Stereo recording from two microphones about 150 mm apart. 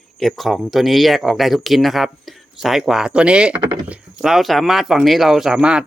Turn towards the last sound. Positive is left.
turn(degrees=-5)  # may be behind; listen again after turning